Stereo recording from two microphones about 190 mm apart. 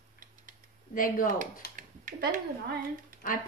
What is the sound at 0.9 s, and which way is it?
Speech, 45° left (ahead or behind).